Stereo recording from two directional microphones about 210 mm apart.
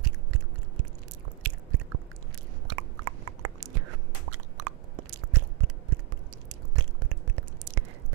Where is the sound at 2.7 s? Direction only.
90° right.